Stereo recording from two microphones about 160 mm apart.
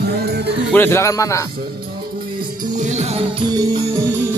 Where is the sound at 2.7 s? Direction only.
50° right (ahead or behind).